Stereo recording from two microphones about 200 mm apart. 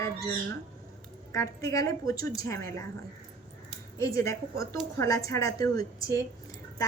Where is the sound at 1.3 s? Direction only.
15° left (ahead or behind).